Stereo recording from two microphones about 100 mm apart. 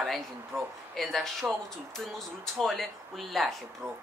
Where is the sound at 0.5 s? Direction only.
25° right (ahead or behind).